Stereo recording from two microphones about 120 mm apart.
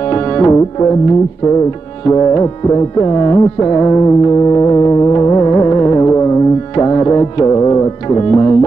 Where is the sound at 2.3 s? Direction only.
30° left (ahead or behind).